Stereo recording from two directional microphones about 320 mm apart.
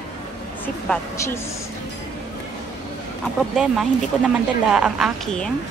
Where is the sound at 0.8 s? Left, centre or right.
Centre.